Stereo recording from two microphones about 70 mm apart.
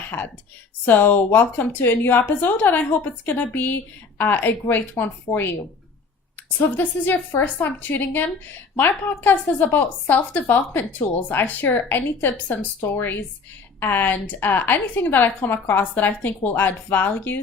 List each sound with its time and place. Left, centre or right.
0.9 s a woman's voice: left
6.6 s a woman's voice: left